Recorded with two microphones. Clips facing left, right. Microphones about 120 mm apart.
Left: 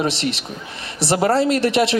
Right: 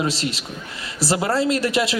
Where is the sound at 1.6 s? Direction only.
25° left (ahead or behind).